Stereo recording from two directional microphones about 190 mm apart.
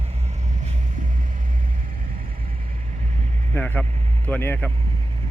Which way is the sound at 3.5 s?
10° left (ahead or behind).